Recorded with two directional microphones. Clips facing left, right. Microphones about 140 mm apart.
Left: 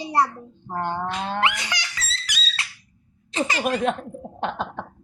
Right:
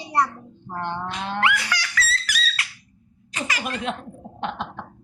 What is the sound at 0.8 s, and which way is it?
Speech, 45° left (ahead or behind).